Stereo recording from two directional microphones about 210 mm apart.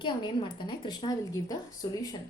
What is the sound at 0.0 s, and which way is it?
A woman's voice, 20° left (ahead or behind).